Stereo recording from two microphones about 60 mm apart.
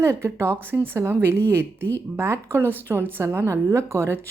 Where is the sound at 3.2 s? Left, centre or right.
Right.